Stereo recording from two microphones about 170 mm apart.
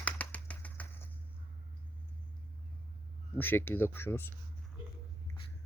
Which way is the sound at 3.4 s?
10° left (ahead or behind).